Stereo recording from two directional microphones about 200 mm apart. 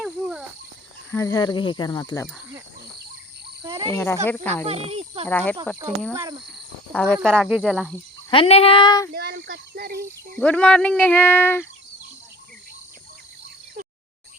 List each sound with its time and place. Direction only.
0.0 s cricket: centre (ahead or behind)
1.1 s speech: 15° left (ahead or behind)
3.6 s frog: 20° right (ahead or behind)
3.9 s speech: 15° left (ahead or behind)
4.6 s speech: 30° right (ahead or behind)
5.3 s speech: 10° left (ahead or behind)
6.1 s speech: 20° right (ahead or behind)
6.9 s speech: 5° left (ahead or behind)
8.3 s speech: 30° left (ahead or behind)
9.1 s a sound: 60° right (ahead or behind)
10.3 s speech: 5° left (ahead or behind)